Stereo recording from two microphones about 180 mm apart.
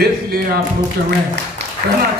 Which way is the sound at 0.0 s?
60° right (ahead or behind).